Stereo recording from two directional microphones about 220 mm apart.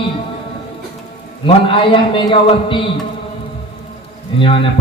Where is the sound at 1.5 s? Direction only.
25° left (ahead or behind).